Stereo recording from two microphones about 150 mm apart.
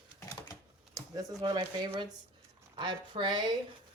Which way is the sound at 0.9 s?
25° right (ahead or behind).